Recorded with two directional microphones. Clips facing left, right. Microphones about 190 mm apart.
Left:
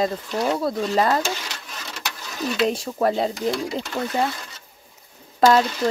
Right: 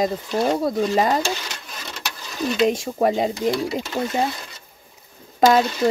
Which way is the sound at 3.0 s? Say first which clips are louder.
Right 2 dB; 15° right (ahead or behind).